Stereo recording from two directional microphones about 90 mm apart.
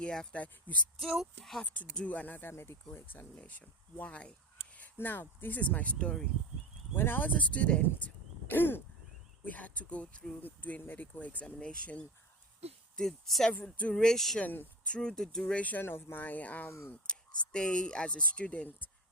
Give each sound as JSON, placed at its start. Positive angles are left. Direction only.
{"t": 0.0, "sound": "speech", "side_deg": 10}
{"t": 0.9, "sound": "speech", "side_deg": -5}
{"t": 1.6, "sound": "speech", "side_deg": 15}
{"t": 6.9, "sound": "speech", "side_deg": 25}
{"t": 14.4, "sound": "speech", "side_deg": 20}
{"t": 14.9, "sound": "speech", "side_deg": 5}